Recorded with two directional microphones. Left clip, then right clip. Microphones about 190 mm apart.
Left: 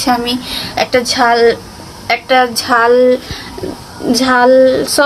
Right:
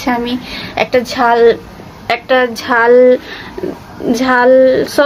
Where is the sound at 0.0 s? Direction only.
25° right (ahead or behind).